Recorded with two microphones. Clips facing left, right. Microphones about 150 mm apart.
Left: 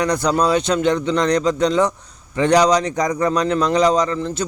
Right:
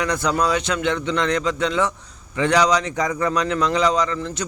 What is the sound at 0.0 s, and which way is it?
A man's voice, 35° left (ahead or behind).